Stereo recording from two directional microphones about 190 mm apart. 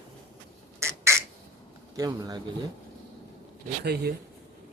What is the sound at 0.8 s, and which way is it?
Squawk, 15° right (ahead or behind).